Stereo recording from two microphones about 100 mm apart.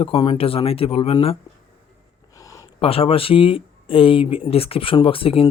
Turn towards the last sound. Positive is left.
turn(degrees=70)  # may be behind; listen again after turning